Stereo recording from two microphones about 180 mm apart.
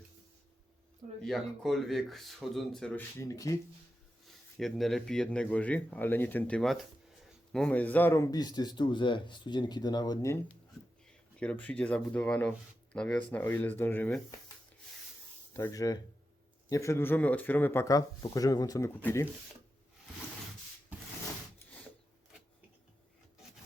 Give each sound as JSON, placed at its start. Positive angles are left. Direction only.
{"t": 1.2, "sound": "speech", "side_deg": 0}
{"t": 3.2, "sound": "speech", "side_deg": 20}
{"t": 4.3, "sound": "a man's voice", "side_deg": 0}
{"t": 11.3, "sound": "speech", "side_deg": 5}
{"t": 15.5, "sound": "a man's voice", "side_deg": 15}